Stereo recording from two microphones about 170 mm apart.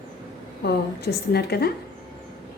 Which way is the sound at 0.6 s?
70° left (ahead or behind).